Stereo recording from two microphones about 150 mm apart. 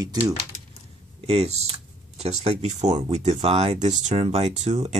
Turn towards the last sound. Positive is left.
turn(degrees=-45)  # may be behind; listen again after turning